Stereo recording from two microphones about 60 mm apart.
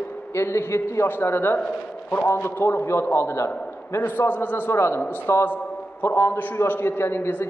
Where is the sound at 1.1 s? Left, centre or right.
Left.